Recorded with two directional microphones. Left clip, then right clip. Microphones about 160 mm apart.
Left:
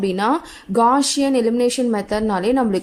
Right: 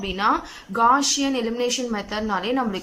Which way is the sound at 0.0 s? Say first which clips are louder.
Left 2 dB; 30° left (ahead or behind).